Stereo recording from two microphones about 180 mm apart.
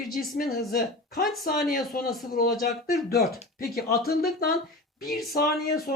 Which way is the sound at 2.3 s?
55° left (ahead or behind).